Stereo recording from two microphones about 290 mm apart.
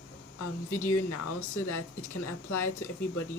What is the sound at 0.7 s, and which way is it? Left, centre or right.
A woman's voice, left.